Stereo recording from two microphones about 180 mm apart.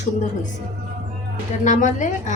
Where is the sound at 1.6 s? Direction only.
45° left (ahead or behind).